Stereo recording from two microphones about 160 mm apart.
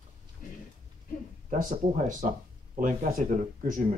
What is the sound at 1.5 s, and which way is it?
Speech, 55° right (ahead or behind).